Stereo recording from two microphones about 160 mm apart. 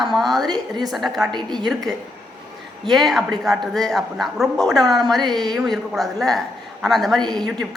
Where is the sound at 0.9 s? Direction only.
Centre (ahead or behind).